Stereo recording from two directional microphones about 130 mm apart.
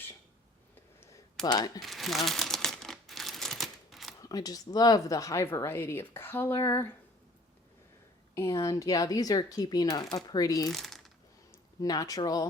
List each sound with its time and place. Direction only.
1.5 s speech: 30° left (ahead or behind)
1.8 s crumpling: centre (ahead or behind)
4.2 s speech: 30° left (ahead or behind)
8.4 s speech: 25° left (ahead or behind)
10.7 s a sound: centre (ahead or behind)
11.5 s speech: 25° left (ahead or behind)